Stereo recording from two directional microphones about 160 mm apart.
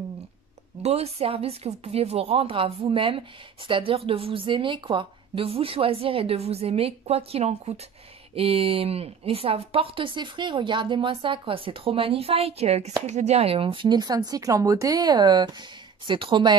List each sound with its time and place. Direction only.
0.8 s speech: 40° right (ahead or behind)